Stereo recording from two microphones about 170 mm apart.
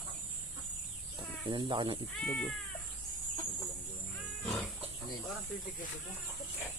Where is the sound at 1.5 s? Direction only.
25° right (ahead or behind).